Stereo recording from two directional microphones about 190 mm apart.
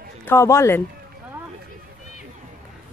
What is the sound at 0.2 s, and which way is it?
Speech, 15° left (ahead or behind).